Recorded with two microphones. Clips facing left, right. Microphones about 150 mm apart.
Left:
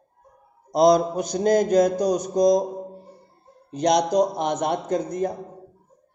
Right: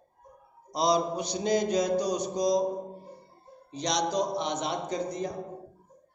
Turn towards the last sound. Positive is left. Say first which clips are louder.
# left 7 dB
turn(degrees=50)  # may be behind; listen again after turning